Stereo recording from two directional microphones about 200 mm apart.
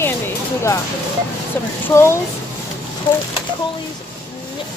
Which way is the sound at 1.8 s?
15° left (ahead or behind).